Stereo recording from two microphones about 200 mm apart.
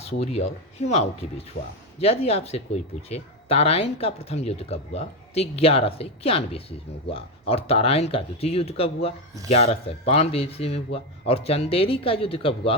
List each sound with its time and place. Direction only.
0.1 s speech: 30° left (ahead or behind)